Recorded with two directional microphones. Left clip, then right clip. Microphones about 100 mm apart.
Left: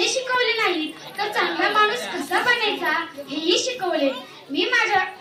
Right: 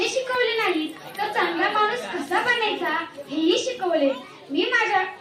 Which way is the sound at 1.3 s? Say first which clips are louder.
Left 1 dB; 30° left (ahead or behind).